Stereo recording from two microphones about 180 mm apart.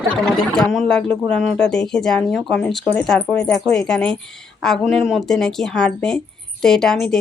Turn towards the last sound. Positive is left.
turn(degrees=5)  # may be behind; listen again after turning